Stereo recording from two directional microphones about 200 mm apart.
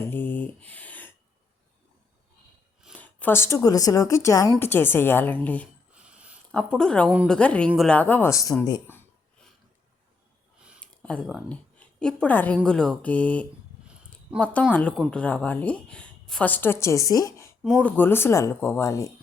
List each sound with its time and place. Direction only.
0.1 s a sound: 10° left (ahead or behind)
2.9 s a woman's voice: 10° left (ahead or behind)
5.9 s a sound: 5° right (ahead or behind)
6.5 s speech: 5° left (ahead or behind)
7.3 s a woman's voice: 5° left (ahead or behind)
11.0 s a woman's voice: 5° left (ahead or behind)
17.6 s speech: centre (ahead or behind)
17.9 s a woman's voice: 10° left (ahead or behind)